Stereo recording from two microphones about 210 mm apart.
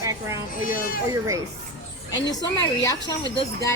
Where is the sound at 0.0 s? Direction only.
15° right (ahead or behind).